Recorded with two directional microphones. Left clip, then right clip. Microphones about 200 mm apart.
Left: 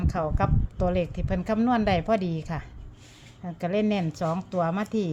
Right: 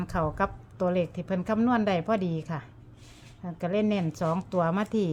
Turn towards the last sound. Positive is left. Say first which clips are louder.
# even
turn(degrees=-5)  # may be behind; listen again after turning